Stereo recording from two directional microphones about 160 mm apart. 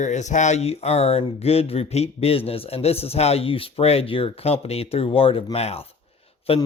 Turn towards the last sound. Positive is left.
turn(degrees=35)  # may be behind; listen again after turning